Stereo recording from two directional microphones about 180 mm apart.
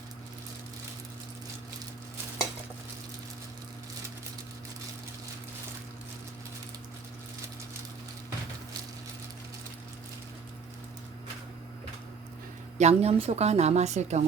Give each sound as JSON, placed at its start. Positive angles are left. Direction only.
{"t": 12.8, "sound": "a woman's voice", "side_deg": -35}